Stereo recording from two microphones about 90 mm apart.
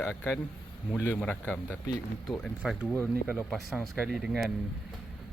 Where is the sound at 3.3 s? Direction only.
Centre (ahead or behind).